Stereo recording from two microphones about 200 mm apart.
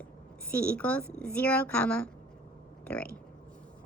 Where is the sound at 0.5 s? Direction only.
5° left (ahead or behind).